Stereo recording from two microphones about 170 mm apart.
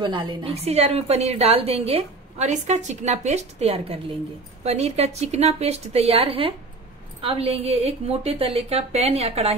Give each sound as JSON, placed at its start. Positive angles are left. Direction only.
{"t": 0.0, "sound": "a woman's voice", "side_deg": -30}